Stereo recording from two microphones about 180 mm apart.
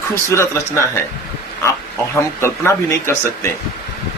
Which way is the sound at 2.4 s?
15° left (ahead or behind).